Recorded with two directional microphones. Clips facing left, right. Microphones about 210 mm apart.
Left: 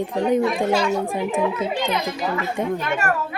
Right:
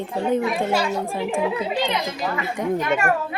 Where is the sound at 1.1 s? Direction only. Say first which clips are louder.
Left 1 dB; 20° left (ahead or behind).